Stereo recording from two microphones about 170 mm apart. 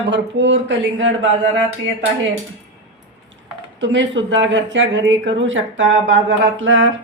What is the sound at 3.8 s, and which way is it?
Speech, 90° right.